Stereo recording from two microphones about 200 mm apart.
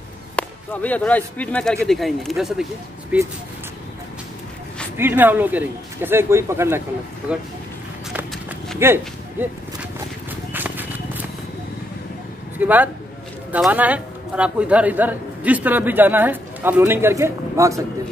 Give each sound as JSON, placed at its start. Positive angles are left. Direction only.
{"t": 0.4, "sound": "speech", "side_deg": 5}
{"t": 4.9, "sound": "a man's voice", "side_deg": -10}
{"t": 8.1, "sound": "run", "side_deg": -5}
{"t": 8.7, "sound": "a sound", "side_deg": -10}
{"t": 10.5, "sound": "clip-clop", "side_deg": -10}
{"t": 12.5, "sound": "a man's voice", "side_deg": -10}